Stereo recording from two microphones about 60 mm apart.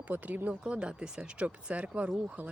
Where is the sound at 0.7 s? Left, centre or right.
Centre.